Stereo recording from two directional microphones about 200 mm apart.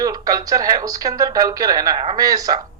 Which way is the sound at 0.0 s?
15° right (ahead or behind).